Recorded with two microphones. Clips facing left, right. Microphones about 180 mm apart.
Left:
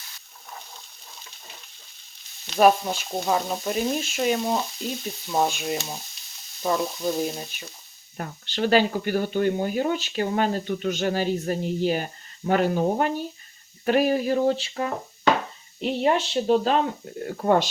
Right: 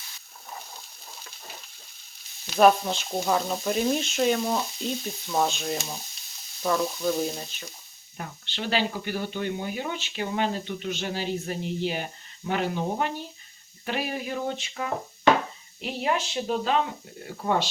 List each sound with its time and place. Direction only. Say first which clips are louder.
2.6 s sizzle: left 1 dB; 5° left (ahead or behind)
3.2 s frying: left 1 dB; 5° left (ahead or behind)
5.4 s sizzle: left 2 dB; 10° left (ahead or behind)
7.2 s frying: left 2 dB; 5° left (ahead or behind)
8.2 s speech: left 7 dB; 45° left (ahead or behind)
17.2 s speech: left 5 dB; 50° left (ahead or behind)